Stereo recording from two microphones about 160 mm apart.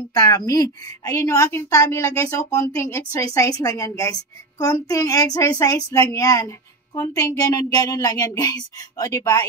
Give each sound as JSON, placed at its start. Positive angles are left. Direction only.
{"t": 0.1, "sound": "a woman's voice", "side_deg": 25}